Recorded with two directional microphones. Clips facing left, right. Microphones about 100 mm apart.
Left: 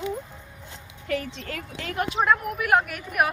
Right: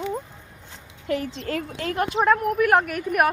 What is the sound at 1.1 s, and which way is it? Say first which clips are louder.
A woman's voice: right 3 dB; 25° right (ahead or behind).